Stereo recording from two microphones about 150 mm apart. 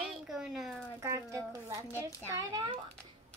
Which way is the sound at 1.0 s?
20° right (ahead or behind).